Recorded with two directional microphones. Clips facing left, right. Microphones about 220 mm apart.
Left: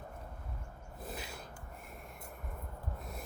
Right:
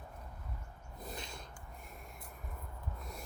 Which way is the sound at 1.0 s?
5° left (ahead or behind).